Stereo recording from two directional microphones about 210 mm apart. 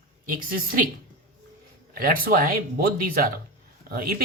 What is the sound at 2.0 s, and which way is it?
Speech, 45° right (ahead or behind).